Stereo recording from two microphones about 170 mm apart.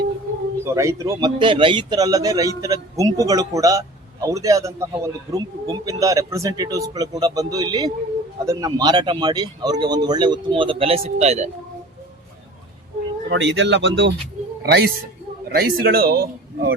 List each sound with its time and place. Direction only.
0.6 s a man's voice: 15° right (ahead or behind); by 11.5 s 40° right (ahead or behind)
13.2 s speech: 90° right
14.6 s a man's voice: 65° right (ahead or behind)